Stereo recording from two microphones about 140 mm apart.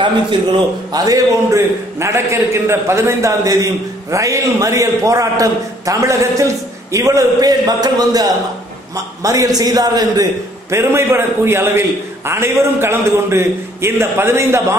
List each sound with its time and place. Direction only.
0.0 s a man's voice: 35° right (ahead or behind); by 14.8 s 20° right (ahead or behind)